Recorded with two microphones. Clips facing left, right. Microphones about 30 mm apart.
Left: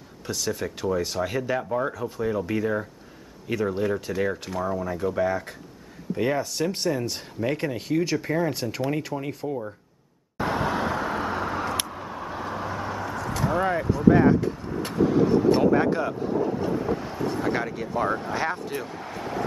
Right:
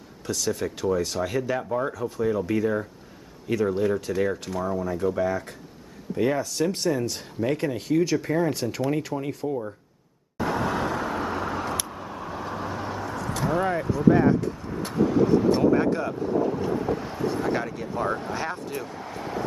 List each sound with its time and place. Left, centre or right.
0.3 s speech: centre
10.3 s vehicle: centre
16.5 s speech: centre
18.7 s a sound: centre